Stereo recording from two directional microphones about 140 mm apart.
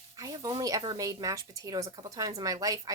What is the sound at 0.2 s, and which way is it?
Speech, 25° right (ahead or behind).